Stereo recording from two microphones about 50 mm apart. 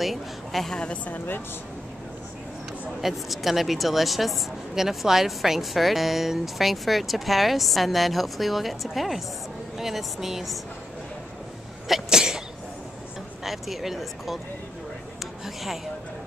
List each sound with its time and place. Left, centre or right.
0.0 s a woman's voice: centre
0.7 s a woman's voice: left
3.0 s speech: centre
11.9 s cough: centre
13.4 s speech: centre
15.4 s speech: centre